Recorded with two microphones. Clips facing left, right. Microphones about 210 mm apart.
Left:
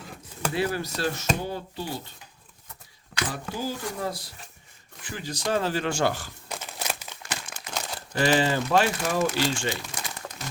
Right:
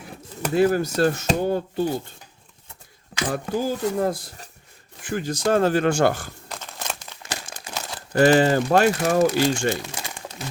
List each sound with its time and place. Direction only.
0.5 s speech: 45° right (ahead or behind)
3.4 s speech: 25° right (ahead or behind)
3.9 s speech: 50° right (ahead or behind)
6.5 s crumpling: 10° left (ahead or behind)
7.3 s crumpling: 35° right (ahead or behind)
8.1 s speech: 50° right (ahead or behind)
9.9 s crumpling: 30° right (ahead or behind)